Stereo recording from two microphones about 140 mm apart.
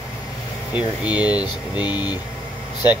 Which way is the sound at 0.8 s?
10° right (ahead or behind).